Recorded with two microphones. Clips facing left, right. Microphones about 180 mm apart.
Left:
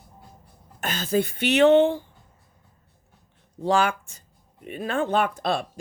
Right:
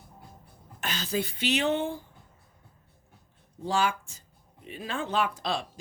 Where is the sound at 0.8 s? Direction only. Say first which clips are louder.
Left 7 dB; 50° left (ahead or behind); by 2.0 s 75° left (ahead or behind).